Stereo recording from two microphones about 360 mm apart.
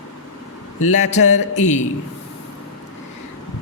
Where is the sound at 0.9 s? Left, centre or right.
Centre.